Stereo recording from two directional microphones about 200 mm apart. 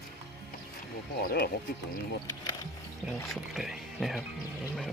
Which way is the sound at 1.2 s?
50° left (ahead or behind).